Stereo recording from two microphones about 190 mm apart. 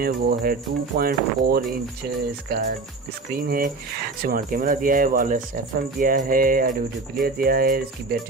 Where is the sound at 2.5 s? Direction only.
55° right (ahead or behind).